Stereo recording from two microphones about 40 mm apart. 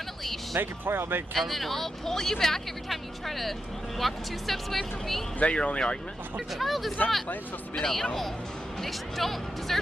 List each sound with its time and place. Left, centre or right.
0.2 s music: centre
0.6 s speech: right
1.3 s speech: centre
5.4 s speech: left
6.5 s speech: centre